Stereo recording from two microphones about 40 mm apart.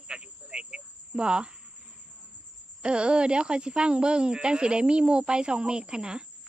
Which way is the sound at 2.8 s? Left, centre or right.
Right.